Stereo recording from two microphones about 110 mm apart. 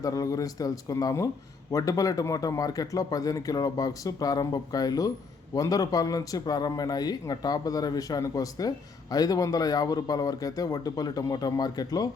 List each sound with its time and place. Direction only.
0.0 s speech: 30° left (ahead or behind)